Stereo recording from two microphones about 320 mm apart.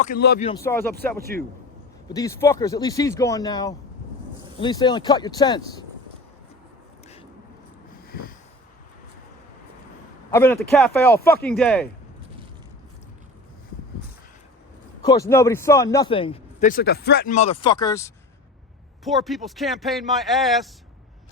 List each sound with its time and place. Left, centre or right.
0.0 s speech: left
0.4 s a man's voice: centre
1.3 s speech: right
2.0 s a man's voice: centre
8.0 s sniff: left
10.3 s a man's voice: centre
15.0 s a man's voice: centre